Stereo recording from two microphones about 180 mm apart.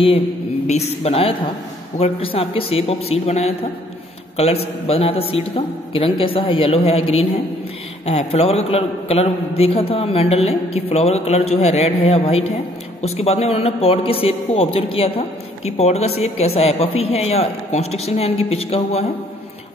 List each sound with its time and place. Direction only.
0.7 s a man's voice: 35° left (ahead or behind)